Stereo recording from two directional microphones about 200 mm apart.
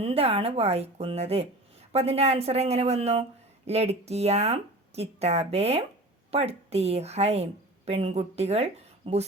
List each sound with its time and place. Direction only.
0.0 s a woman's voice: 30° right (ahead or behind)